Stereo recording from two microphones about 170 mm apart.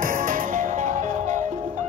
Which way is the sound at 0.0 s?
55° right (ahead or behind).